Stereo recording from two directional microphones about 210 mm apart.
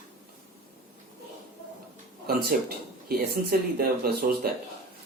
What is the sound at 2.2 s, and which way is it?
Speech, 45° right (ahead or behind).